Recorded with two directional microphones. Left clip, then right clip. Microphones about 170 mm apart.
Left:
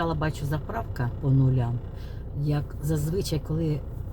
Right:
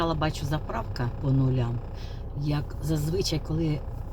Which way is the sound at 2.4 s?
15° left (ahead or behind).